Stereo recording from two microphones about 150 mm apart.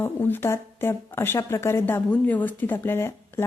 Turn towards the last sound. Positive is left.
turn(degrees=15)  # may be behind; listen again after turning